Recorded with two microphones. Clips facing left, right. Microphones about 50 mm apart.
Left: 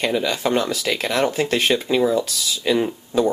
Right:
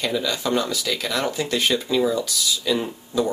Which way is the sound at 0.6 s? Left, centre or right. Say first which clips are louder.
Left 3 dB; left.